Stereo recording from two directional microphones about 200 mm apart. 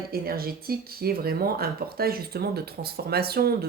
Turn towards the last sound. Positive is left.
turn(degrees=-50)  # may be behind; listen again after turning